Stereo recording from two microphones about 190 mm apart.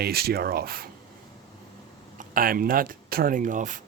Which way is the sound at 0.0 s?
55° right (ahead or behind).